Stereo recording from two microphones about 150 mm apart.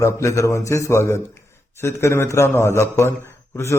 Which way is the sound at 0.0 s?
20° left (ahead or behind).